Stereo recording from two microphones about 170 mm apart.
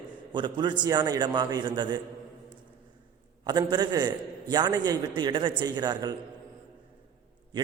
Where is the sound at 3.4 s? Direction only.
25° right (ahead or behind).